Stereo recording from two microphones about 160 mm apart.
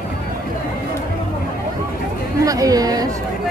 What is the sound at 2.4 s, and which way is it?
Speech, 20° right (ahead or behind).